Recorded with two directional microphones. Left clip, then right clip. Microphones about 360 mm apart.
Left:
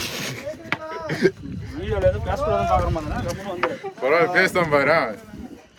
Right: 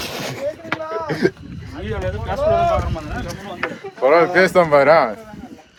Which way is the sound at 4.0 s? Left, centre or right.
Centre.